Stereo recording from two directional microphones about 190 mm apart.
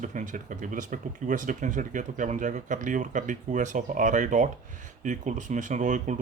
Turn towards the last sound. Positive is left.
turn(degrees=-40)  # may be behind; listen again after turning